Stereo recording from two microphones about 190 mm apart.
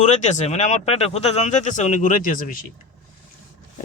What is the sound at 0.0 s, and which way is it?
Speech, 40° left (ahead or behind).